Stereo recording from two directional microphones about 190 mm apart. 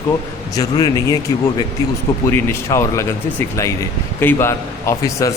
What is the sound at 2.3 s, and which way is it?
Speech, 15° left (ahead or behind).